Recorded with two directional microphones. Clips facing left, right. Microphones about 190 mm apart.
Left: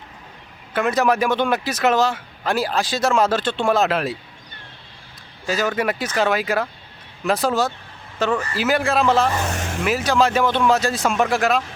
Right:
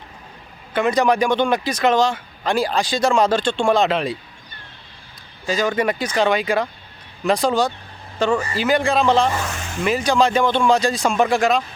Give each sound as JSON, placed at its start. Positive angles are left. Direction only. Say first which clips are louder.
{"t": 0.7, "sound": "speech", "louder": "right 2 dB", "side_deg": 5}
{"t": 5.5, "sound": "speech", "louder": "right 2 dB", "side_deg": 5}
{"t": 9.5, "sound": "vehicle", "louder": "left 3 dB", "side_deg": 50}
{"t": 9.8, "sound": "speech", "louder": "right 1 dB", "side_deg": 5}